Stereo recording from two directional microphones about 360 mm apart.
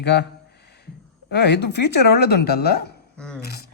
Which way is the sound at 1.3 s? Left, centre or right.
Left.